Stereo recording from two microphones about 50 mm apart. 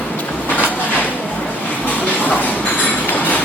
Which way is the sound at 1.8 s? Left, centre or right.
Left.